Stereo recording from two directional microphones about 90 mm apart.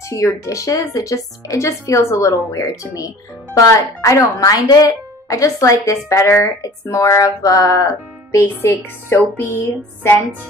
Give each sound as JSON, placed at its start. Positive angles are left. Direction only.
{"t": 0.1, "sound": "speech", "side_deg": 35}